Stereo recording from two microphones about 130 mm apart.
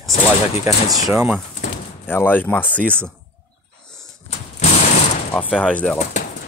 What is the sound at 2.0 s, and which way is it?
Speech, 15° left (ahead or behind).